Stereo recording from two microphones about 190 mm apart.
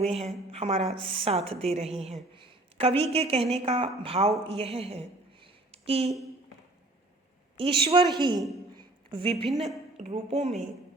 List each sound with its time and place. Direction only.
0.0 s a woman's voice: 30° right (ahead or behind)
4.4 s a sound: 30° right (ahead or behind)
7.5 s a woman's voice: 30° right (ahead or behind)
8.7 s a sound: 25° right (ahead or behind)
9.5 s a woman's voice: centre (ahead or behind)
10.0 s a woman's voice: 30° right (ahead or behind)